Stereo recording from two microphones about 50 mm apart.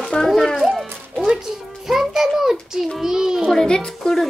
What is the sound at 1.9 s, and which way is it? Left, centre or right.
Music, centre.